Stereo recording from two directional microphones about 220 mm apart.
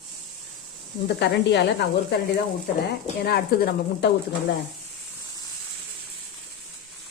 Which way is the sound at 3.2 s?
45° left (ahead or behind).